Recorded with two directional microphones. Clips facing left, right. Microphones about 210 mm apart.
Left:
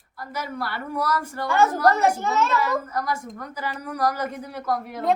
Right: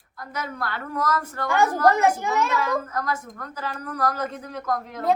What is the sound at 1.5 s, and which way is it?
A child's voice, 15° right (ahead or behind).